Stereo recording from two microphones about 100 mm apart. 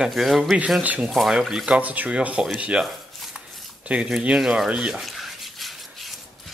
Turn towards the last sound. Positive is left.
turn(degrees=0)  # may be behind; listen again after turning